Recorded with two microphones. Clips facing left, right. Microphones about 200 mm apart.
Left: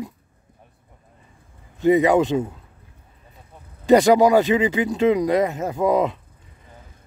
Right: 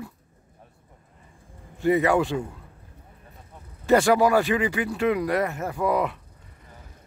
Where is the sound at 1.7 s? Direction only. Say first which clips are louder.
Left 5 dB; 20° left (ahead or behind).